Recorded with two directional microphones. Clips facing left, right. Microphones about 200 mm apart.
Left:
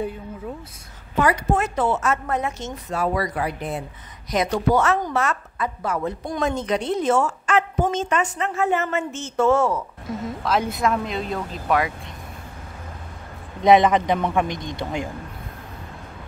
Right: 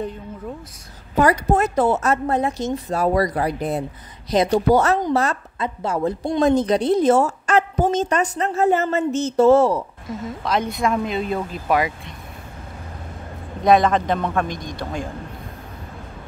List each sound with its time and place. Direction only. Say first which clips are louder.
1.1 s a woman's voice: right 3 dB; 40° right (ahead or behind)
10.0 s speech: even; centre (ahead or behind)
13.6 s a man's voice: left 1 dB; 20° left (ahead or behind)